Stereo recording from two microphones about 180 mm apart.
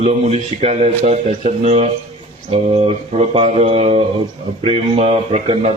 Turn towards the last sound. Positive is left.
turn(degrees=-35)  # may be behind; listen again after turning